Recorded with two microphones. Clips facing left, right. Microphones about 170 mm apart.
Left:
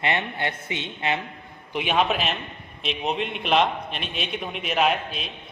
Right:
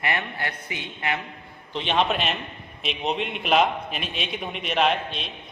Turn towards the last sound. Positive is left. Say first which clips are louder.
# even
turn(degrees=5)  # may be behind; listen again after turning